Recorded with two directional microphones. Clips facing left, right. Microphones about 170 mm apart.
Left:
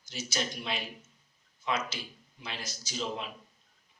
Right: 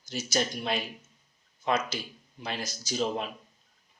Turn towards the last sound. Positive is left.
turn(degrees=-45)  # may be behind; listen again after turning